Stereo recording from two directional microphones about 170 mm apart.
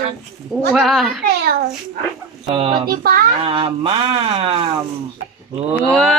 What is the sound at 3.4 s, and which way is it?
Speech, 30° right (ahead or behind).